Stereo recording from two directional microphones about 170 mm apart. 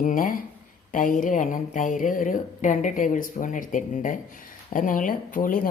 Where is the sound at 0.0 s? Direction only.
50° left (ahead or behind).